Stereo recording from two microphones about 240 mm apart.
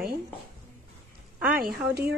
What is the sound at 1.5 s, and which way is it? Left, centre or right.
Speech, right.